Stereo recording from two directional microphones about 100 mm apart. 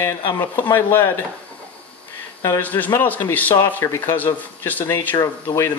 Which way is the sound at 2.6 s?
15° left (ahead or behind).